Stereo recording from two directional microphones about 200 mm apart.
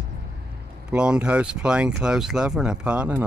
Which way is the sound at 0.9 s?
5° right (ahead or behind).